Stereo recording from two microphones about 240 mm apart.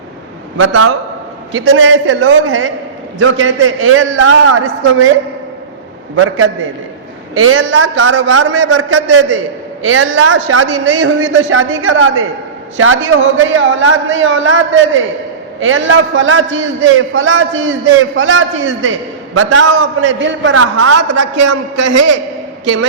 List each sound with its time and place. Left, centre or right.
0.6 s a man's voice: right
6.1 s a man's voice: right
20.6 s a man's voice: right